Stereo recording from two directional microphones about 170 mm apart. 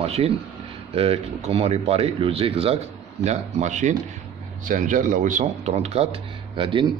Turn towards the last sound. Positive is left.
turn(degrees=-30)  # may be behind; listen again after turning